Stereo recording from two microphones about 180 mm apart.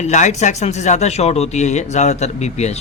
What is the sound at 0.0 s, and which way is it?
A man's voice, 40° left (ahead or behind).